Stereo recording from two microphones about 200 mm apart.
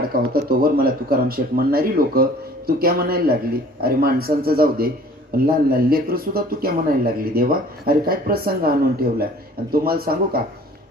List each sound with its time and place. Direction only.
0.1 s speech: 45° right (ahead or behind)